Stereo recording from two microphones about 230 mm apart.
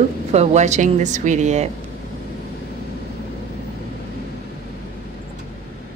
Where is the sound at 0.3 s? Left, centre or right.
Right.